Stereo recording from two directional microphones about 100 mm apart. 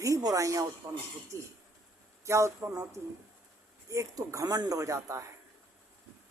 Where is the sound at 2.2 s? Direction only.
30° right (ahead or behind).